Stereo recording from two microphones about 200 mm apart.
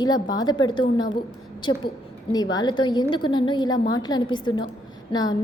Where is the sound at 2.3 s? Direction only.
20° left (ahead or behind).